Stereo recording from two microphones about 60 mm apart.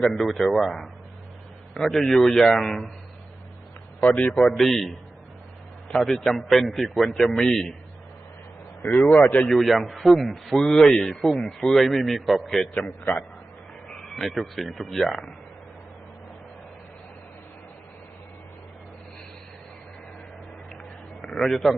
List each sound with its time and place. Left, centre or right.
0.0 s a man's voice: centre
4.1 s a man's voice: centre
4.5 s a man's voice: centre
9.0 s speech: centre
9.2 s a man's voice: centre
14.2 s a man's voice: centre
21.2 s a man's voice: centre